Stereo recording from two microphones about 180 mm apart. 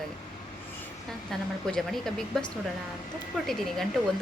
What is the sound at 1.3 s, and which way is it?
A woman's voice, centre (ahead or behind).